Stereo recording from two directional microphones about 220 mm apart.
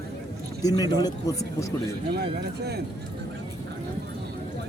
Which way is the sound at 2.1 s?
50° right (ahead or behind).